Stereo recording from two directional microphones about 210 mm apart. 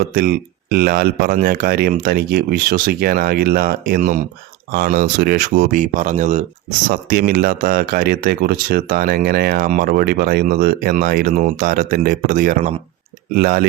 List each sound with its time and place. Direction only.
0.1 s speech: 45° right (ahead or behind)